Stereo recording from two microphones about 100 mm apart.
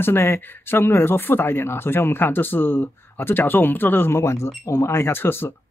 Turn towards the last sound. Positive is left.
turn(degrees=20)  # may be behind; listen again after turning